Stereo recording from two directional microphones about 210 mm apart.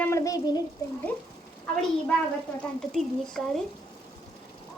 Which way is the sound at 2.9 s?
Centre (ahead or behind).